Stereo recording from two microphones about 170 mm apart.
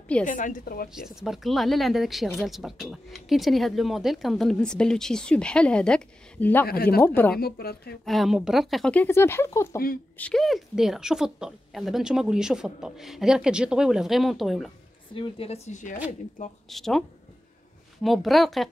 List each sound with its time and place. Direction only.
0.3 s a woman's voice: 50° left (ahead or behind)
0.9 s speech: centre (ahead or behind)
6.7 s speech: 65° left (ahead or behind)
8.0 s speech: centre (ahead or behind)
15.1 s a woman's voice: 30° left (ahead or behind)
16.6 s speech: centre (ahead or behind)
18.0 s speech: centre (ahead or behind)